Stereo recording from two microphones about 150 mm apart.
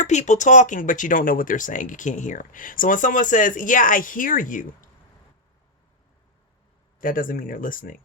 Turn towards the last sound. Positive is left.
turn(degrees=65)  # may be behind; listen again after turning